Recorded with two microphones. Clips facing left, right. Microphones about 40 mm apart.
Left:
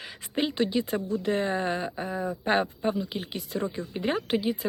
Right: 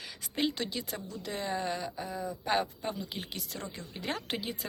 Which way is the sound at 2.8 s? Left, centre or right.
Centre.